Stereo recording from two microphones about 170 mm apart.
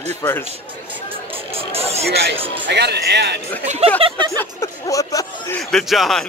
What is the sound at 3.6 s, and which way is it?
Speech, 40° right (ahead or behind).